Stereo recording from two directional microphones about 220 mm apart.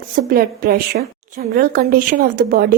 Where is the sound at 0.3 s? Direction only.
40° right (ahead or behind).